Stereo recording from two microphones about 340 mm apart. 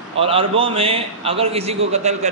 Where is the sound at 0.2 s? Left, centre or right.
Centre.